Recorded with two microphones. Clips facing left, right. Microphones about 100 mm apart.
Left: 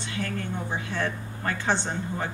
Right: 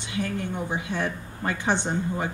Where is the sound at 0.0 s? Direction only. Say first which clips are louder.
Right 2 dB; 15° right (ahead or behind).